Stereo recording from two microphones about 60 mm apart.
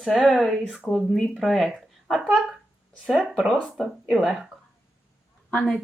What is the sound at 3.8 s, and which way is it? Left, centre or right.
Speech, centre.